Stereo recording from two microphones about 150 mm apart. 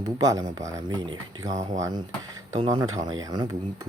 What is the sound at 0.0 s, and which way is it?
Speech, 25° right (ahead or behind).